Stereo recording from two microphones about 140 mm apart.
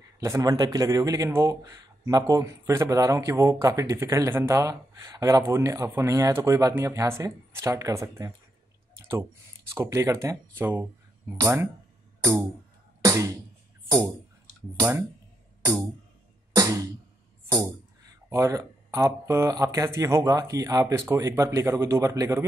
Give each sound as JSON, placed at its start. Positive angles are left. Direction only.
{"t": 0.2, "sound": "a man's voice", "side_deg": -25}
{"t": 9.7, "sound": "a man's voice", "side_deg": -20}
{"t": 12.2, "sound": "music", "side_deg": -20}
{"t": 13.8, "sound": "speech", "side_deg": -25}
{"t": 15.6, "sound": "music", "side_deg": -25}
{"t": 17.5, "sound": "a man's voice", "side_deg": -25}